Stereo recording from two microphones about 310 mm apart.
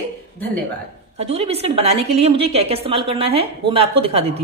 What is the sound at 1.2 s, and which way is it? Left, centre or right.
A woman's voice, centre.